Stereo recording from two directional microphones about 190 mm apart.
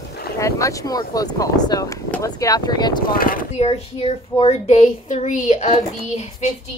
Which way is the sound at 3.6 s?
30° left (ahead or behind).